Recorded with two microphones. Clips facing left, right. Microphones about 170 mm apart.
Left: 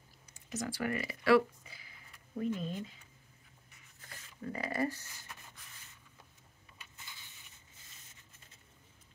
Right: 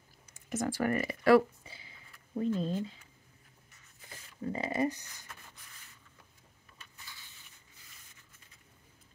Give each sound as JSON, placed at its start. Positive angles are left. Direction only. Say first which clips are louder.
{"t": 0.5, "sound": "speech", "louder": "right 5 dB", "side_deg": -50}
{"t": 1.6, "sound": "a sound", "louder": "right 3 dB", "side_deg": -25}
{"t": 4.4, "sound": "speech", "louder": "right 3 dB", "side_deg": -25}